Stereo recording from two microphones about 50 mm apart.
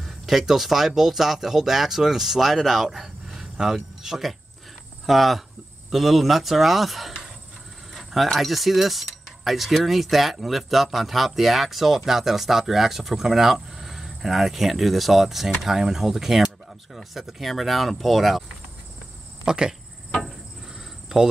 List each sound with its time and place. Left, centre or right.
0.0 s speech: centre
19.4 s speech: centre